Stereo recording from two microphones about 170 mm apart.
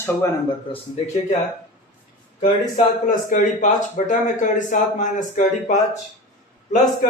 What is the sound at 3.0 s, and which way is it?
A man's voice, 50° left (ahead or behind).